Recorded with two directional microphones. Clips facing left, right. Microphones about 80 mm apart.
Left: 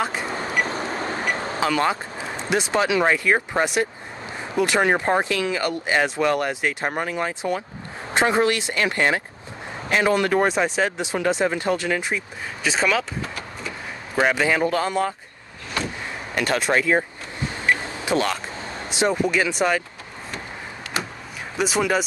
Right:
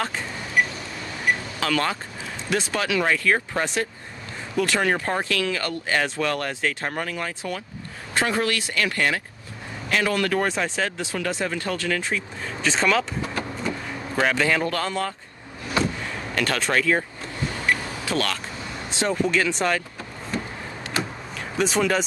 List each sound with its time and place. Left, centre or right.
0.3 s a sound: left
1.6 s speech: left
12.6 s speech: centre
14.1 s speech: centre
16.3 s speech: centre
17.6 s vehicle: left
18.9 s speech: centre
21.5 s speech: centre